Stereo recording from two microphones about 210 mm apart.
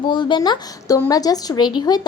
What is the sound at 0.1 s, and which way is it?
Speech, 20° left (ahead or behind).